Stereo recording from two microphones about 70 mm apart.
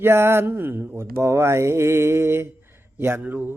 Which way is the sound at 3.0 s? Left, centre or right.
Right.